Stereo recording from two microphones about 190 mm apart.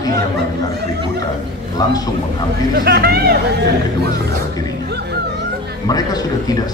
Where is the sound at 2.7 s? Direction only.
55° right (ahead or behind).